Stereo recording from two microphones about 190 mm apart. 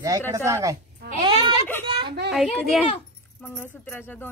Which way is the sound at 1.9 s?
25° right (ahead or behind).